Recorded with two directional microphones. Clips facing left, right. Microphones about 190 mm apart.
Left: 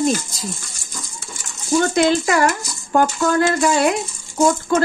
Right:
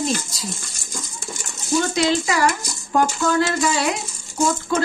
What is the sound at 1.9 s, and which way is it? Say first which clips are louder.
Speech: left 4 dB; 55° left (ahead or behind).